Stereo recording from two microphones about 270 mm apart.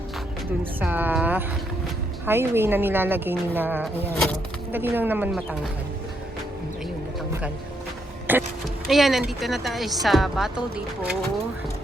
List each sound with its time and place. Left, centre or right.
0.8 s speech: centre
8.3 s vehicle: centre
8.9 s speech: centre